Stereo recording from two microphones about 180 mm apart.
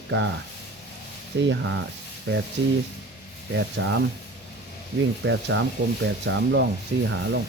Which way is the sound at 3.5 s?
80° right.